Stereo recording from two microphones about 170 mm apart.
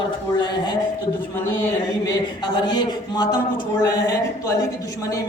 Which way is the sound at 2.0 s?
25° left (ahead or behind).